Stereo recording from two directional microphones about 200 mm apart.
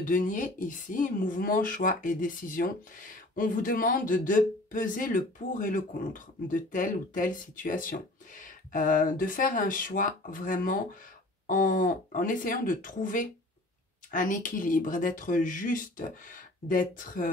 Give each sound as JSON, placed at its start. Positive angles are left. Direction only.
{"t": 0.0, "sound": "speech", "side_deg": 40}